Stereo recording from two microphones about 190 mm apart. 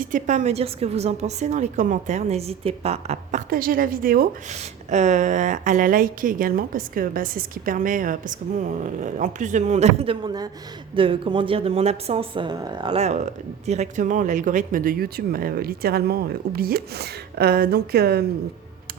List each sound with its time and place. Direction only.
0.0 s a woman's voice: 40° right (ahead or behind)
4.5 s a woman's voice: 40° right (ahead or behind); by 18.3 s 55° right (ahead or behind)